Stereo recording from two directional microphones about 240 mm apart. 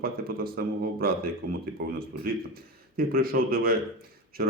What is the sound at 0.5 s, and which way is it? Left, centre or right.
A man's voice, right.